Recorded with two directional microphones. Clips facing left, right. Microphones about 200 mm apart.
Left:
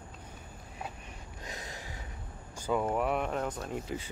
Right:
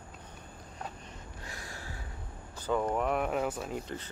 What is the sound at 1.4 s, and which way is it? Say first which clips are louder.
Gasp: left 3 dB; 20° left (ahead or behind).